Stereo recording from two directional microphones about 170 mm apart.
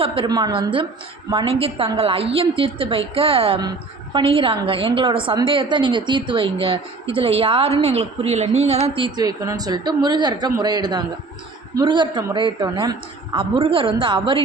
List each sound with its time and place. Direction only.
0.0 s a woman's voice: 35° right (ahead or behind)